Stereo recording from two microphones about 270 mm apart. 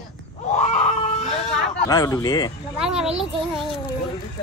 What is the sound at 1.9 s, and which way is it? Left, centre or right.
Speech, centre.